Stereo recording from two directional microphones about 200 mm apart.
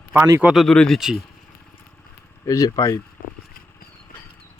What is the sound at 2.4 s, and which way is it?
Speech, 15° left (ahead or behind).